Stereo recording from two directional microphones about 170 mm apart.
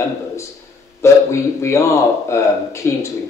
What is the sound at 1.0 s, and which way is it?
Speech, 15° left (ahead or behind).